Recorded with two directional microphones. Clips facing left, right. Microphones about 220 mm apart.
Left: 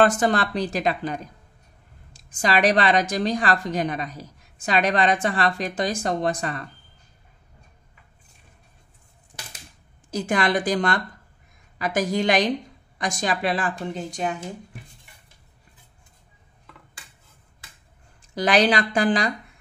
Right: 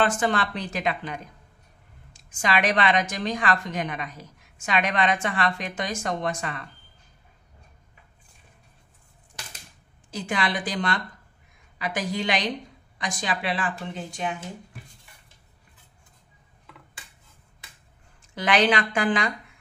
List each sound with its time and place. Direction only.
0.0 s a woman's voice: 40° left (ahead or behind)
10.1 s a woman's voice: 45° left (ahead or behind)
18.3 s a woman's voice: 35° left (ahead or behind)